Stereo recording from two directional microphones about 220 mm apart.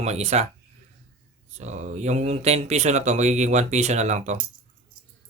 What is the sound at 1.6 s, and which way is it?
Speech, 30° right (ahead or behind).